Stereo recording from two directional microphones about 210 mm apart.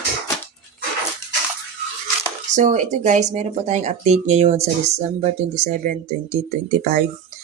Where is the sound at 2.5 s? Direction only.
35° right (ahead or behind).